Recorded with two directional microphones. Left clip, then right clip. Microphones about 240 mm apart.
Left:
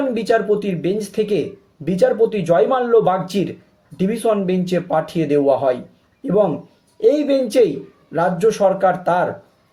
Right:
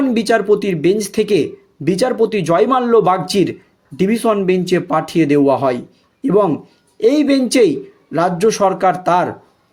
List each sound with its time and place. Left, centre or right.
0.1 s speech: right